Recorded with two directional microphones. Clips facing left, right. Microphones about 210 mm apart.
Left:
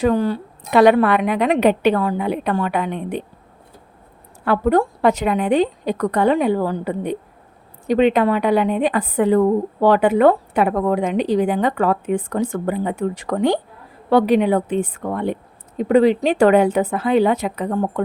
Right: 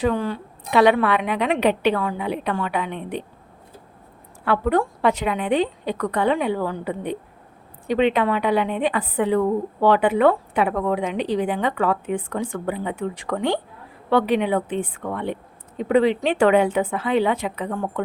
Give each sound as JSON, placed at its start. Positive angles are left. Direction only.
{"t": 0.0, "sound": "a woman's voice", "side_deg": 40}
{"t": 4.4, "sound": "a woman's voice", "side_deg": 40}